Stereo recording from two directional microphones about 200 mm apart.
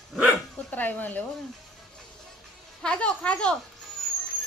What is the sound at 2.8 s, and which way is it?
Speech, 5° left (ahead or behind).